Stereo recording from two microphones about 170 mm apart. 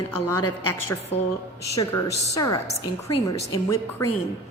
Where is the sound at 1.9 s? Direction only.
20° left (ahead or behind).